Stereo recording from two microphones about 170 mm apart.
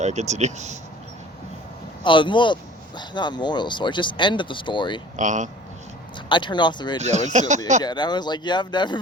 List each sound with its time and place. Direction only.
0.0 s speech: 40° right (ahead or behind)
2.0 s speech: 30° left (ahead or behind)
5.1 s speech: 45° right (ahead or behind)
6.2 s speech: 30° left (ahead or behind)
7.0 s speech: 45° right (ahead or behind)
7.9 s speech: 25° left (ahead or behind)